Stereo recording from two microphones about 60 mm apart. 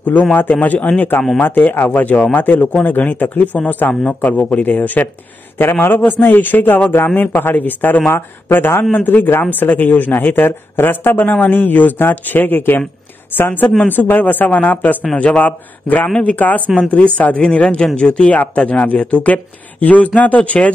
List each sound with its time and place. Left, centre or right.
0.0 s speech: left